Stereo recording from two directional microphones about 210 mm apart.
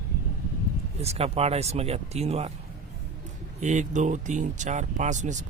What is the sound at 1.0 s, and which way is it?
Speech, 30° right (ahead or behind).